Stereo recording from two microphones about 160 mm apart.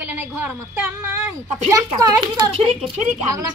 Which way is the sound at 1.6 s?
20° right (ahead or behind).